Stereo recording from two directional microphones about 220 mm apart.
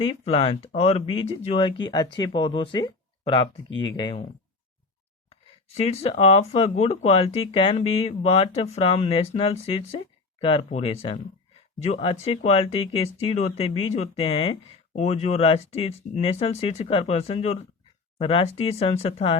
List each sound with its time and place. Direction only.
0.1 s speech: 25° left (ahead or behind)
5.3 s speech: 30° left (ahead or behind)